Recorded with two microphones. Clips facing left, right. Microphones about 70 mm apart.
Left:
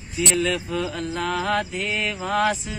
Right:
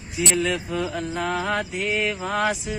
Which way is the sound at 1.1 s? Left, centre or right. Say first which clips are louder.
Left 2 dB; centre.